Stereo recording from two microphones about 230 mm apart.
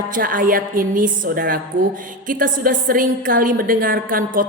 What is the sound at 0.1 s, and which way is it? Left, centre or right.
A woman's voice, right.